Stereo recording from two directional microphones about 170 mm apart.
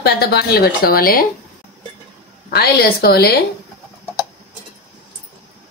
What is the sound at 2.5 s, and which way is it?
Speech, 65° left (ahead or behind).